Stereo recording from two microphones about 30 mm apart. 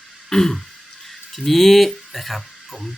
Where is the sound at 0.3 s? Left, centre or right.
Centre.